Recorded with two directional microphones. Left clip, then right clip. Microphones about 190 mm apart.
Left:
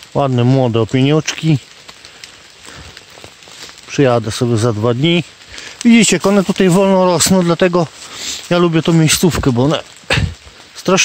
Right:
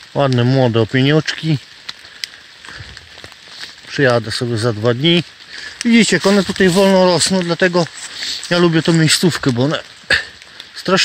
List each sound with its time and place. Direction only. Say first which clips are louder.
0.1 s speech: left 1 dB; 5° left (ahead or behind)
3.9 s speech: left 1 dB; 15° left (ahead or behind); by 8.4 s 30° left (ahead or behind)
8.5 s speech: left 1 dB; 15° left (ahead or behind)